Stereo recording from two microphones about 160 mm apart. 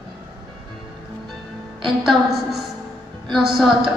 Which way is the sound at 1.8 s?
Centre (ahead or behind).